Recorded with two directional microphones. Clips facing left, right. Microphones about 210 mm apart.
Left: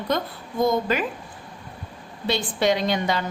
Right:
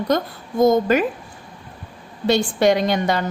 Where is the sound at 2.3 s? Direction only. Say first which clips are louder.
Right 6 dB; 45° right (ahead or behind).